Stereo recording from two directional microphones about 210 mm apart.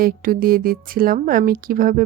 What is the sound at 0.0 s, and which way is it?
Speech, 45° right (ahead or behind).